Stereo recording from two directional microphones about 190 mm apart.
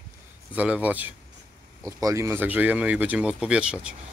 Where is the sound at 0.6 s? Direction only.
5° right (ahead or behind).